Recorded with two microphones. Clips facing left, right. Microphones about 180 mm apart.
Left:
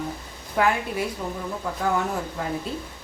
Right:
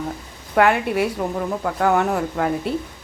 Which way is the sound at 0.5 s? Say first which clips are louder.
Right 6 dB; 70° right (ahead or behind).